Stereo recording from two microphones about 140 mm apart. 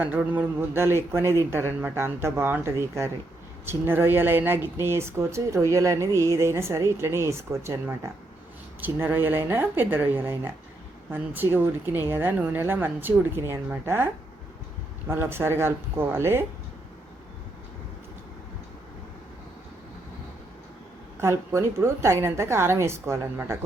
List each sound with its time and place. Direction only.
0.0 s a woman's voice: 10° right (ahead or behind)
21.2 s a woman's voice: 20° right (ahead or behind)